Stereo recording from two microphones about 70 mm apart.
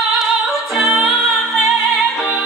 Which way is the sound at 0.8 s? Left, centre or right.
Centre.